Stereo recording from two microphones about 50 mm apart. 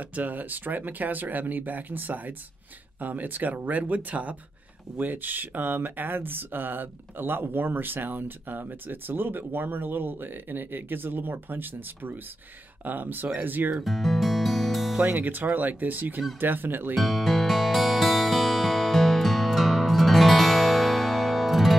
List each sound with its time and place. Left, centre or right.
0.0 s speech: right
13.8 s music: centre
15.0 s speech: right
16.9 s music: centre